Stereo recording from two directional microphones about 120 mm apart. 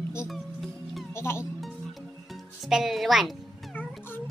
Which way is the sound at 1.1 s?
20° left (ahead or behind).